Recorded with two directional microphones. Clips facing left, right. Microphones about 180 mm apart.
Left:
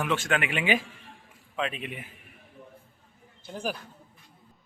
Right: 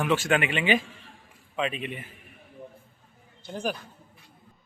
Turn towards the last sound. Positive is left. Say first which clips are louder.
# right 2 dB
turn(degrees=5)  # may be behind; listen again after turning